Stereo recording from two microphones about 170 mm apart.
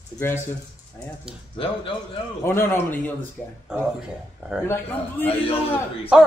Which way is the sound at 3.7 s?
5° right (ahead or behind).